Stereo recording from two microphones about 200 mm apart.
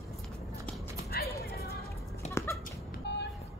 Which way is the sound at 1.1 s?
50° left (ahead or behind).